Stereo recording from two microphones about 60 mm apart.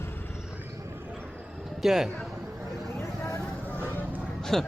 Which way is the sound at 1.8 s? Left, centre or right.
Centre.